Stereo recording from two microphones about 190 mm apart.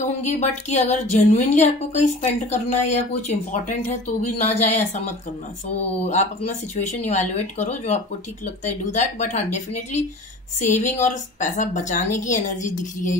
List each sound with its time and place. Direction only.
0.0 s a woman's voice: 40° left (ahead or behind)
10.6 s a woman's voice: 40° left (ahead or behind)